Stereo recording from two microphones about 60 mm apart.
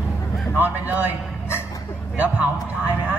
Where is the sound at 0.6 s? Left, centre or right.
Right.